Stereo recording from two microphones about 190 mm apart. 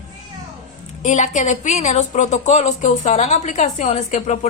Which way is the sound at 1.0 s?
40° left (ahead or behind).